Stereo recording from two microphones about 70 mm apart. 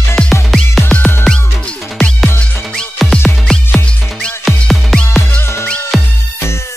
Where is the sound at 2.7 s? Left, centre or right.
Centre.